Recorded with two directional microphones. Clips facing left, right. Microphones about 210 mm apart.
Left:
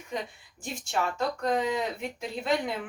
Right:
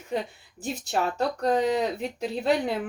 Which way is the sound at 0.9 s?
35° right (ahead or behind).